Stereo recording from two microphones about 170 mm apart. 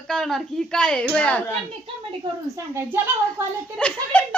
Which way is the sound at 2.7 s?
15° right (ahead or behind).